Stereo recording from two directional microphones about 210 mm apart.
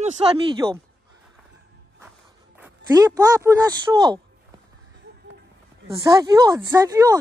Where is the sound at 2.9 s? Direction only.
15° right (ahead or behind).